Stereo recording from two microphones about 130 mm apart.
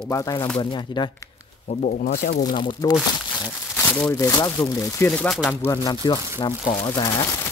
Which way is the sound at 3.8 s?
20° left (ahead or behind).